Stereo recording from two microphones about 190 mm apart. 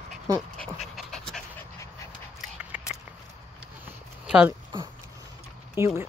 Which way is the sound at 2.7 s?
5° right (ahead or behind).